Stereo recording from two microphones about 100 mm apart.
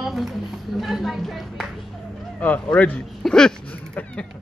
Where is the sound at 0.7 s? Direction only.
Centre (ahead or behind).